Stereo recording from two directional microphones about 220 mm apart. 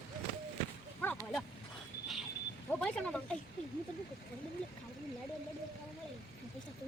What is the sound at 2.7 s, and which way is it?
Speech, 5° left (ahead or behind).